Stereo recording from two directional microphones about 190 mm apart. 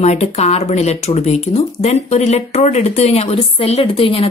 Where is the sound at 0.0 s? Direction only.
35° left (ahead or behind).